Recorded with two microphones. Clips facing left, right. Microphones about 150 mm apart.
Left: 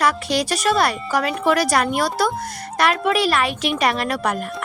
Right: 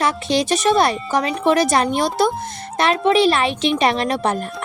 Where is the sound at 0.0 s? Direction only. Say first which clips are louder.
Right 1 dB; 25° right (ahead or behind).